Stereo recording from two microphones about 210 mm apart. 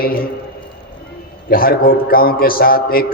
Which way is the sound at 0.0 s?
45° left (ahead or behind).